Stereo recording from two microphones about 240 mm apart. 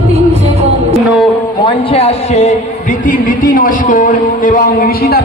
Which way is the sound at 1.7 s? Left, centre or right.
Left.